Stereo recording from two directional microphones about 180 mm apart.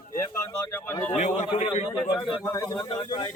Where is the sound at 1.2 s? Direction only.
40° left (ahead or behind).